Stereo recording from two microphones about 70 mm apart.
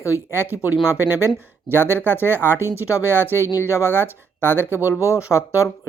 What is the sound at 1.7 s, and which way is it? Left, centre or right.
Speech, left.